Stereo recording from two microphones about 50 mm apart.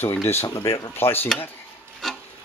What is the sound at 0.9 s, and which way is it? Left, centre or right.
Speech, left.